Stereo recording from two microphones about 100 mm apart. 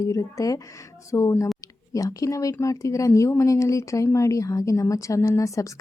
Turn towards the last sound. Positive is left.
turn(degrees=30)  # may be behind; listen again after turning